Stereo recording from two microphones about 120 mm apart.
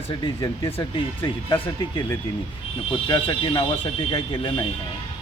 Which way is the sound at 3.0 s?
45° left (ahead or behind).